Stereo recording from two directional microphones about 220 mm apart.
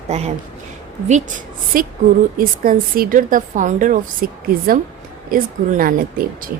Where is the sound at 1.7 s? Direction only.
40° right (ahead or behind).